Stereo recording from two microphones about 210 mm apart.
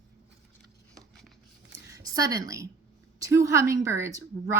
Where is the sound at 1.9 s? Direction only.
15° right (ahead or behind).